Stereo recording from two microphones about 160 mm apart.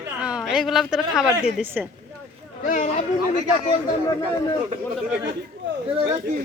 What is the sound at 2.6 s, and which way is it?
Speech, 50° left (ahead or behind).